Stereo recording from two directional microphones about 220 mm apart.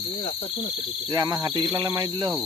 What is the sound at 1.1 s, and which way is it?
Speech, 20° right (ahead or behind).